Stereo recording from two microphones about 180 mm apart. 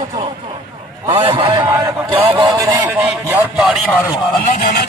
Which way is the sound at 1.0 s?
30° right (ahead or behind).